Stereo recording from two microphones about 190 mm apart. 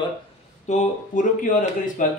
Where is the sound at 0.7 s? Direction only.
40° left (ahead or behind).